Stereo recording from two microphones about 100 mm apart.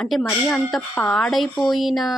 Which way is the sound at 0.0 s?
5° left (ahead or behind).